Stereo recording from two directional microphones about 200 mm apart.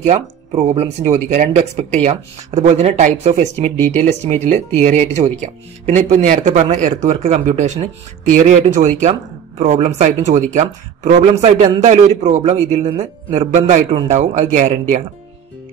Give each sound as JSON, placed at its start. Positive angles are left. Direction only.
{"t": 0.0, "sound": "speech", "side_deg": -35}